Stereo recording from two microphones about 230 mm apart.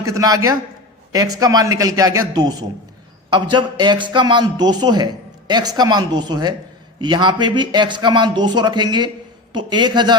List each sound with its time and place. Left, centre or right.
0.0 s a man's voice: centre